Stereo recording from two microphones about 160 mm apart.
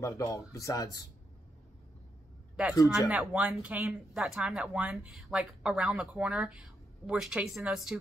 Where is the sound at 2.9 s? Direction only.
5° right (ahead or behind).